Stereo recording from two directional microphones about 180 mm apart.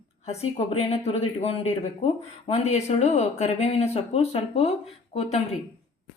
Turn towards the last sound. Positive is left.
turn(degrees=35)  # may be behind; listen again after turning